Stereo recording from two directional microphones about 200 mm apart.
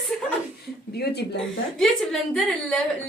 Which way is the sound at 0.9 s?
55° left (ahead or behind).